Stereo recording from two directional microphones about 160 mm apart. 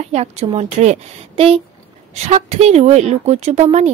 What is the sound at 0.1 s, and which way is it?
A woman's voice, 40° right (ahead or behind).